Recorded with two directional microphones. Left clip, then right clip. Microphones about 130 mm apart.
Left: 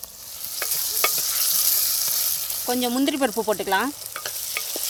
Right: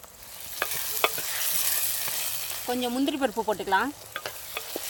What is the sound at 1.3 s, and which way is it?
Stir, 20° left (ahead or behind).